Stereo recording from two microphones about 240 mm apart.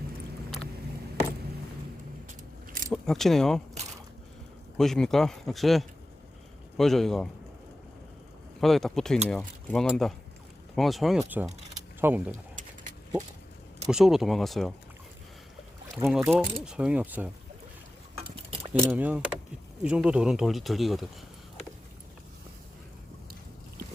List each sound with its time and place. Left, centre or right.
2.9 s speech: centre
4.8 s speech: centre
8.6 s speech: centre
12.3 s a sound: right
13.8 s speech: centre
16.0 s speech: centre
18.7 s speech: centre